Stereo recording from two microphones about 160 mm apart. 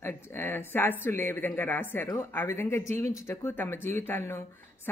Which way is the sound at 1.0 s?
15° left (ahead or behind).